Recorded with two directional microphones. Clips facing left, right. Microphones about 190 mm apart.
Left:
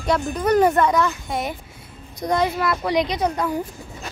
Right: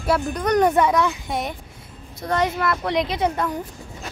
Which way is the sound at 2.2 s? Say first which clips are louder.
Left 1 dB; 15° left (ahead or behind).